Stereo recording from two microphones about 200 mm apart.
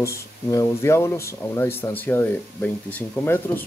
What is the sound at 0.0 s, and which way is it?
Speech, 15° left (ahead or behind).